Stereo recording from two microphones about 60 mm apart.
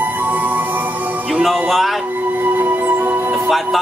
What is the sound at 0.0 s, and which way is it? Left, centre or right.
Music, right.